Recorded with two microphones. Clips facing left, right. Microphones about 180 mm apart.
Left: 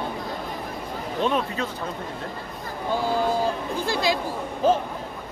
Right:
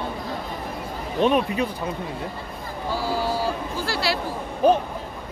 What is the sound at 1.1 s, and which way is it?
Speech, 15° right (ahead or behind).